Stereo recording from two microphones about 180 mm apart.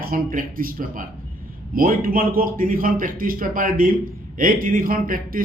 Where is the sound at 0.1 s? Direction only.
50° right (ahead or behind).